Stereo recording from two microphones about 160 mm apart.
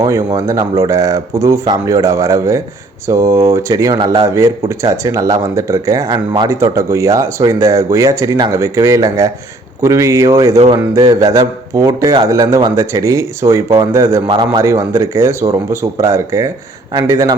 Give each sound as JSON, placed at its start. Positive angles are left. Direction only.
{"t": 0.0, "sound": "speech", "side_deg": -20}
{"t": 4.4, "sound": "speech", "side_deg": -20}
{"t": 14.3, "sound": "speech", "side_deg": -30}